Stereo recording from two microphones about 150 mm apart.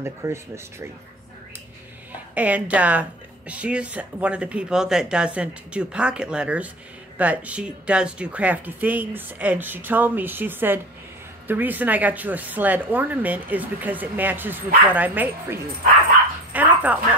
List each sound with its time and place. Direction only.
0.0 s speech: 20° right (ahead or behind)
2.3 s speech: 10° right (ahead or behind)
16.5 s dog: 10° right (ahead or behind)